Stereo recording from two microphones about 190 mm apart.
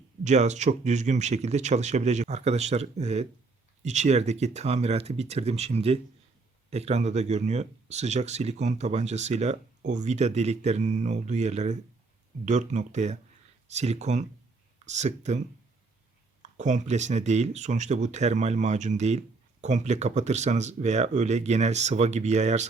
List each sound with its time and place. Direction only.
0.3 s speech: 35° right (ahead or behind)
16.4 s speech: 40° right (ahead or behind)